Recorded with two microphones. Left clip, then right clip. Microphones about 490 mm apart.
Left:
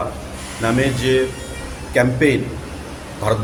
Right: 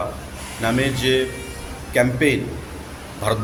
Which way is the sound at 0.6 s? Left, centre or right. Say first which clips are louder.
Left 2 dB; right.